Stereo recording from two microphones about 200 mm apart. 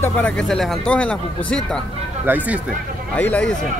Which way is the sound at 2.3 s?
10° right (ahead or behind).